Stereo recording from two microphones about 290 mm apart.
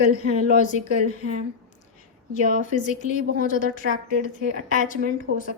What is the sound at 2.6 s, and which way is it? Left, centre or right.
Speech, left.